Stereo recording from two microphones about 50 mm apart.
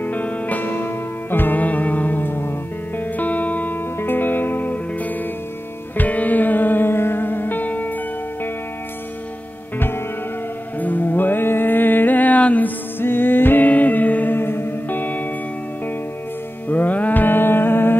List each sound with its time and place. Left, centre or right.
0.0 s music: left
9.8 s music: left
10.8 s music: left
13.0 s music: left
16.6 s music: left